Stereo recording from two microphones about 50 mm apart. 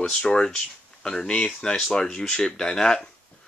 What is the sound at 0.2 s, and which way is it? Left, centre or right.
Speech, centre.